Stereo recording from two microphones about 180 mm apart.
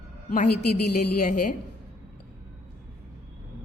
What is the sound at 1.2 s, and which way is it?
Speech, 50° left (ahead or behind).